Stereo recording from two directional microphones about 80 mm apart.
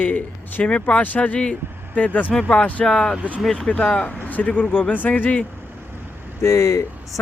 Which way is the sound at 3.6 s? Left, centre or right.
Centre.